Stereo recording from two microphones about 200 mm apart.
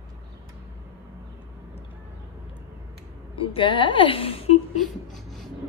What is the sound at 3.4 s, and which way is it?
A woman's voice, 25° left (ahead or behind).